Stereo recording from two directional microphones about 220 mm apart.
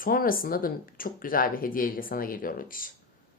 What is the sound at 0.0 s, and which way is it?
Speech, 40° left (ahead or behind).